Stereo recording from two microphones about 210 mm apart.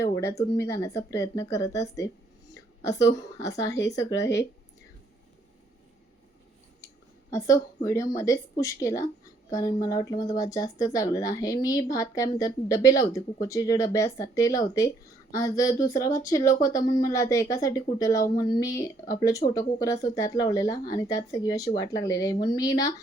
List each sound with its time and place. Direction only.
0.2 s a woman's voice: 15° left (ahead or behind)
7.3 s a woman's voice: 15° left (ahead or behind)